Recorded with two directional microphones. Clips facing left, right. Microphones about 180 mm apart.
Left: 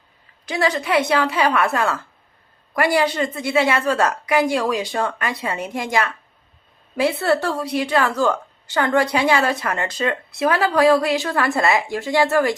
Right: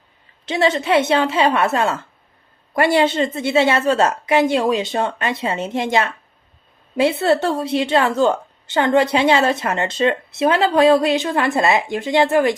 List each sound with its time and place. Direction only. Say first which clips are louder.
0.4 s a woman's voice: right 3 dB; 25° right (ahead or behind)